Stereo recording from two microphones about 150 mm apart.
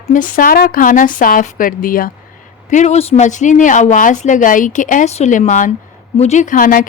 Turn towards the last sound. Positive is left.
turn(degrees=70)  # may be behind; listen again after turning